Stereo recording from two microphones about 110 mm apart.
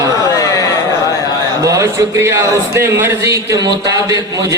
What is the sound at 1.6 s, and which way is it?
Speech, 30° right (ahead or behind).